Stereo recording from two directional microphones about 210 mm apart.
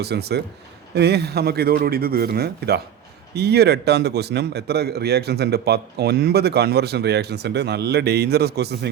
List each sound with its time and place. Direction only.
0.0 s a man's voice: 50° right (ahead or behind)